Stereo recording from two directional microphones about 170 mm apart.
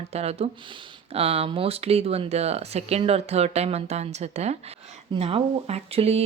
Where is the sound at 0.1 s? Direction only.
40° right (ahead or behind).